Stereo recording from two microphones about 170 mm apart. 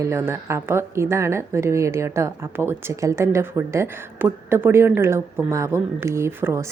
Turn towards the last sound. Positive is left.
turn(degrees=-15)  # may be behind; listen again after turning